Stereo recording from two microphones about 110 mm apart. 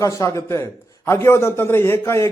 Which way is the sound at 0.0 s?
30° left (ahead or behind).